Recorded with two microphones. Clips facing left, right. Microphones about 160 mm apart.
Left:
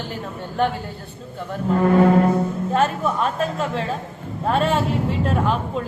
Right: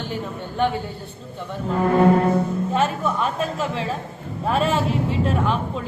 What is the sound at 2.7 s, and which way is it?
A woman's voice, centre (ahead or behind).